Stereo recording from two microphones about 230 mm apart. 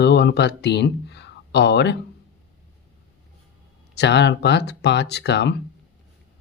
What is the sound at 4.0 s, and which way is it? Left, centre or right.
Speech, left.